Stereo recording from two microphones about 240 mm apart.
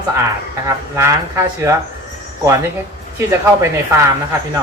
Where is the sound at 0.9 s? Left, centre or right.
Centre.